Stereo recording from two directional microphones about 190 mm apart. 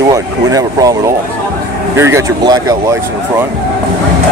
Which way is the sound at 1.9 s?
15° right (ahead or behind).